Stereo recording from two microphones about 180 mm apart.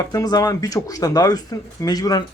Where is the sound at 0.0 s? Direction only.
20° left (ahead or behind).